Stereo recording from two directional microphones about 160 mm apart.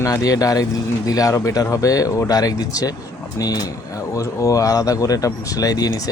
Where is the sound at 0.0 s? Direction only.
20° left (ahead or behind).